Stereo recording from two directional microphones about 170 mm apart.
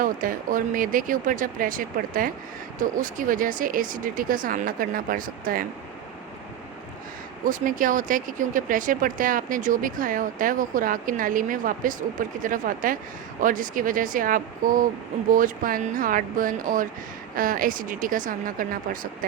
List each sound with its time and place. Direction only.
0.0 s speech: 55° right (ahead or behind)
7.4 s speech: 50° right (ahead or behind)